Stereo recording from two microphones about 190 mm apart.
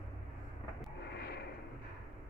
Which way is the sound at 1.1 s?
55° left (ahead or behind).